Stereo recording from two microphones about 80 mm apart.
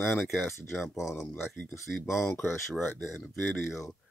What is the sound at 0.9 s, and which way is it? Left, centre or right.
Speech, left.